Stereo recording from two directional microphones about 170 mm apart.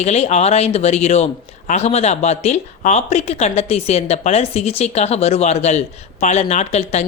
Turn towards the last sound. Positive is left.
turn(degrees=40)  # may be behind; listen again after turning